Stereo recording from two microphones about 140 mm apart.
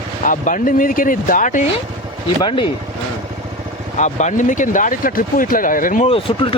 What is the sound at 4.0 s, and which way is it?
Speech, 60° left (ahead or behind).